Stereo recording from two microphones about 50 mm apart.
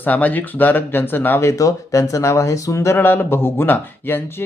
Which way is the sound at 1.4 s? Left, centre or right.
Left.